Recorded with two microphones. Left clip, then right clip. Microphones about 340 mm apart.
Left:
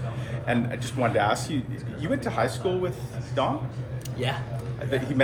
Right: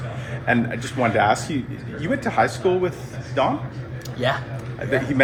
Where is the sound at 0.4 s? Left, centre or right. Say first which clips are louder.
Right 6 dB; right.